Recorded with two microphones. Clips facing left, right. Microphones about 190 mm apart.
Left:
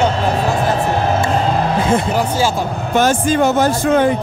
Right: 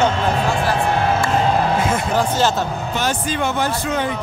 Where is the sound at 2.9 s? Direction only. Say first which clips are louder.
Left 11 dB; 45° left (ahead or behind).